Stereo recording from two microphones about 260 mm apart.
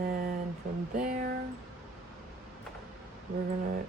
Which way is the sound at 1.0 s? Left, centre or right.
Right.